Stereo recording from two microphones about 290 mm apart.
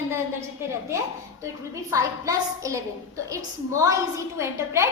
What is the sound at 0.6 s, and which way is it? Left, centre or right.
A woman's voice, centre.